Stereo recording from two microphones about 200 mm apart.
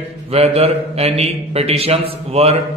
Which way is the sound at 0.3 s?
30° right (ahead or behind).